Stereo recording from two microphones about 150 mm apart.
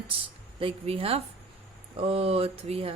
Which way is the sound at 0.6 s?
40° right (ahead or behind).